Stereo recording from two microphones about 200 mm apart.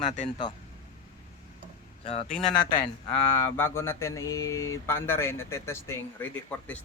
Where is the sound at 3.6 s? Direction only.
10° left (ahead or behind).